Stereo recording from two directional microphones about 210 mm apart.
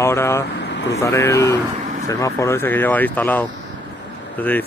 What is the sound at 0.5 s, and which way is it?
Vehicle, 55° left (ahead or behind).